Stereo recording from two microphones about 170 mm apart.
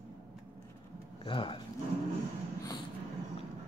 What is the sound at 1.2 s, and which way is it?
Speech, 30° left (ahead or behind).